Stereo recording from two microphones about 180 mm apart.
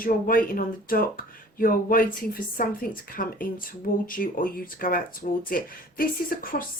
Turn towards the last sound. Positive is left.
turn(degrees=50)  # may be behind; listen again after turning